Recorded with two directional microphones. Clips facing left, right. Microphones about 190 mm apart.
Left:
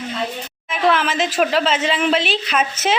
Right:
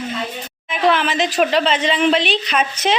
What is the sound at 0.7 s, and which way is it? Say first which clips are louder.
A woman's voice: right 1 dB; centre (ahead or behind).